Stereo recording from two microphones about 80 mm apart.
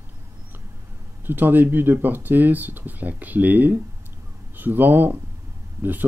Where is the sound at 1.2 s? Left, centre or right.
Right.